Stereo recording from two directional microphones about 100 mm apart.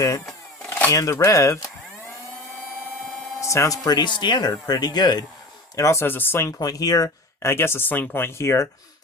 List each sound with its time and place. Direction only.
0.9 s speech: 35° left (ahead or behind)
3.4 s speech: 30° left (ahead or behind)
5.7 s speech: 30° left (ahead or behind)
6.6 s speech: 40° left (ahead or behind)
7.5 s speech: 25° left (ahead or behind)